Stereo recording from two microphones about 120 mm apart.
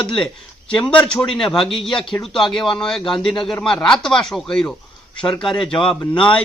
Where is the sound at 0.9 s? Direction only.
5° left (ahead or behind).